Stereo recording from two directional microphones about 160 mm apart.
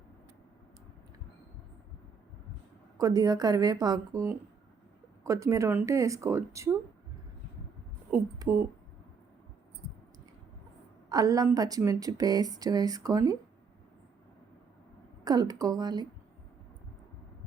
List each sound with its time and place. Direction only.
3.0 s speech: 20° right (ahead or behind)
8.1 s speech: 10° right (ahead or behind)
11.1 s speech: 20° right (ahead or behind)
15.2 s speech: 25° right (ahead or behind)